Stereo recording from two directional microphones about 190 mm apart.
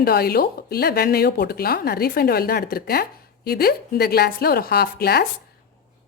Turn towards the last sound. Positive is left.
turn(degrees=55)  # may be behind; listen again after turning